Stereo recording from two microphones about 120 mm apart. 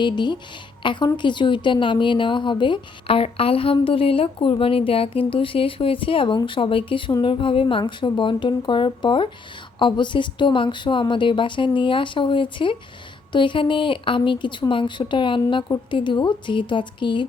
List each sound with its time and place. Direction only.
0.0 s a woman's voice: 40° left (ahead or behind)